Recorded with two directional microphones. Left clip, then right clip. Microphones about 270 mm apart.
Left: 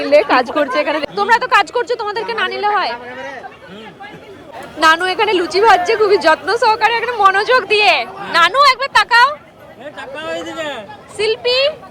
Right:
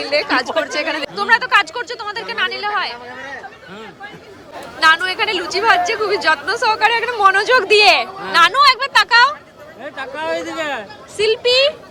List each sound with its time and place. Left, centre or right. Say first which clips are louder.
0.0 s speech: left 6 dB; centre
4.8 s a woman's voice: left 2 dB; centre
9.8 s speech: right 2 dB; right
11.2 s a woman's voice: right 1 dB; centre